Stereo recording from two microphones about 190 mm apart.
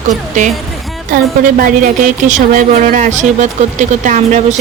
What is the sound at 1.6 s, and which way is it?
Speech, 45° right (ahead or behind).